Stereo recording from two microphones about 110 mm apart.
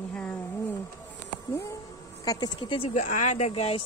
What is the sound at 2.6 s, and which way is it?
Speech, 55° left (ahead or behind).